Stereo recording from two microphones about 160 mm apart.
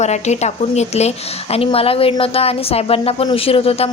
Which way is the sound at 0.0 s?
45° left (ahead or behind).